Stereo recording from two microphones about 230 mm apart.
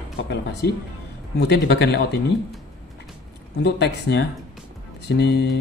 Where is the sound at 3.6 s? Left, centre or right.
Left.